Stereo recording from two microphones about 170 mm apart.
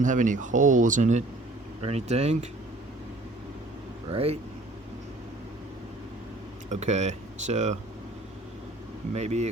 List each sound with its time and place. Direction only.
0.0 s speech: 50° right (ahead or behind)
4.1 s speech: 35° right (ahead or behind)
6.7 s speech: 40° right (ahead or behind)
9.1 s speech: 40° right (ahead or behind)